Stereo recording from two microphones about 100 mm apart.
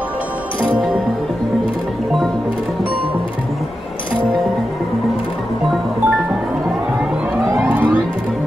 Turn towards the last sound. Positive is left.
turn(degrees=-10)  # may be behind; listen again after turning